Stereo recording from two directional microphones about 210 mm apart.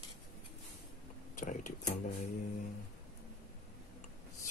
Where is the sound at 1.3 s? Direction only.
35° left (ahead or behind).